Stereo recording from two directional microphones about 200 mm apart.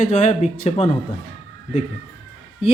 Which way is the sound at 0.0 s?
35° left (ahead or behind).